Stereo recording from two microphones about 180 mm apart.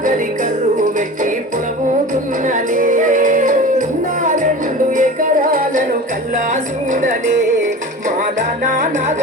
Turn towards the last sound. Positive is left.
turn(degrees=-45)  # may be behind; listen again after turning